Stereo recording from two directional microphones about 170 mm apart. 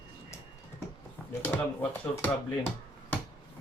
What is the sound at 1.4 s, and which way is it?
Speech, 10° left (ahead or behind).